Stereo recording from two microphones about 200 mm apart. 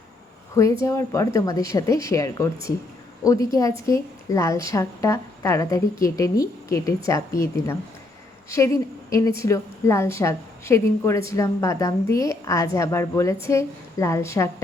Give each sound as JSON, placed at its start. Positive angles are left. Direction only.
{"t": 0.5, "sound": "a woman's voice", "side_deg": 15}